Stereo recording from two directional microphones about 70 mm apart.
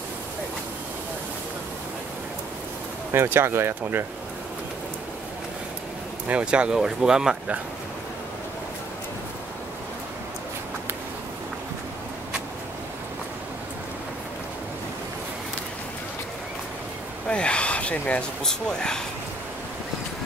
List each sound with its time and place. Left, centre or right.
3.1 s speech: right
6.2 s speech: centre
17.3 s a sound: centre
18.4 s speech: centre